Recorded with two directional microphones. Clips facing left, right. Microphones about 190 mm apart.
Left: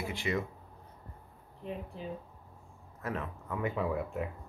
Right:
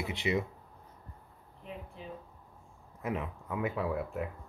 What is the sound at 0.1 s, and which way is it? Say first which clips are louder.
Speech: right 3 dB; 20° right (ahead or behind).